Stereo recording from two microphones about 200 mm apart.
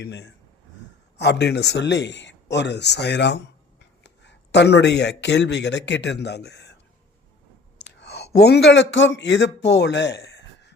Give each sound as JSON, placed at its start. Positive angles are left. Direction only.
{"t": 0.0, "sound": "speech", "side_deg": 55}
{"t": 7.8, "sound": "speech", "side_deg": 55}